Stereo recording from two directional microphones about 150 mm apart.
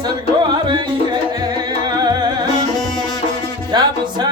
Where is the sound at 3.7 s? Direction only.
30° right (ahead or behind).